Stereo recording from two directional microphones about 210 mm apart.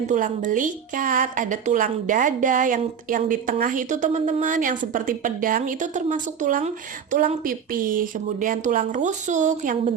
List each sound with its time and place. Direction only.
0.1 s a woman's voice: 40° right (ahead or behind)